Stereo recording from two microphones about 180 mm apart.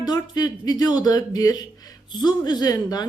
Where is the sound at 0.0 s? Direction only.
20° left (ahead or behind).